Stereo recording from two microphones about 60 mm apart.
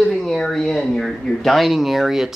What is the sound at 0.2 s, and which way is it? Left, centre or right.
Speech, centre.